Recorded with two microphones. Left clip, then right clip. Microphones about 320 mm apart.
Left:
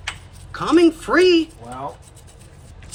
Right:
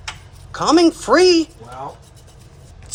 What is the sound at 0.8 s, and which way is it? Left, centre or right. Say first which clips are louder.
Speech: right 1 dB; centre.